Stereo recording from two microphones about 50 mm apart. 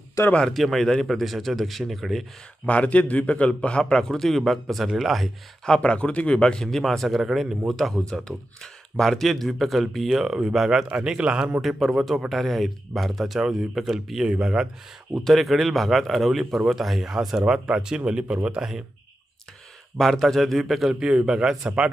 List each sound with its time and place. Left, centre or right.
0.5 s a man's voice: centre
2.6 s a man's voice: left
4.1 s a man's voice: centre
5.8 s a man's voice: left; by 8.0 s centre
8.0 s speech: centre; by 11.6 s right
11.6 s a man's voice: centre
14.3 s speech: centre
15.2 s a man's voice: centre; by 18.6 s right
20.0 s a man's voice: centre
20.9 s speech: centre